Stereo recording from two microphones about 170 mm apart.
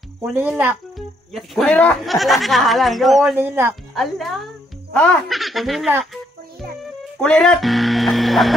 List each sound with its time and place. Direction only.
0.2 s a child's voice: 10° right (ahead or behind)
0.9 s speech: centre (ahead or behind)
3.3 s a child's voice: 15° right (ahead or behind)
3.9 s speech: centre (ahead or behind)